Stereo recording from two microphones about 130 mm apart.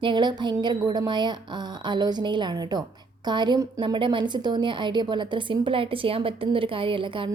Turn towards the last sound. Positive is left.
turn(degrees=-40)  # may be behind; listen again after turning